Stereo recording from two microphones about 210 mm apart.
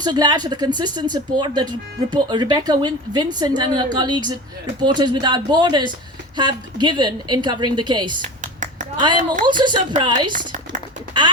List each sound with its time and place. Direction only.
0.0 s speech: 20° right (ahead or behind)
8.2 s a sound: 35° right (ahead or behind)
9.0 s speech: 20° right (ahead or behind)
10.3 s speech: 35° right (ahead or behind)